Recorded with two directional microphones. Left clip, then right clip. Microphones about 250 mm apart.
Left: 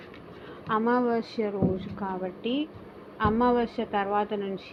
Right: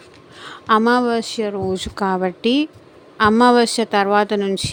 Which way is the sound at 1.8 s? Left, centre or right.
Right.